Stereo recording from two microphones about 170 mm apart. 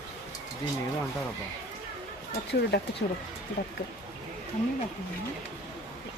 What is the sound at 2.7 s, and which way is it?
Speech, 65° left (ahead or behind).